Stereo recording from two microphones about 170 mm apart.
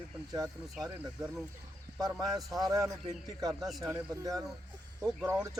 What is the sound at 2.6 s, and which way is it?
Speech, 20° right (ahead or behind).